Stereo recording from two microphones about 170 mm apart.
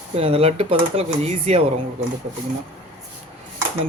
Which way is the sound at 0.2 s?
35° right (ahead or behind).